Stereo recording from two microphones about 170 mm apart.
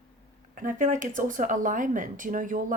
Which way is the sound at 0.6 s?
50° right (ahead or behind).